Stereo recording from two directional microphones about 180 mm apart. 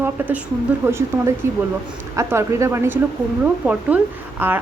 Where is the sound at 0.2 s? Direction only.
10° right (ahead or behind).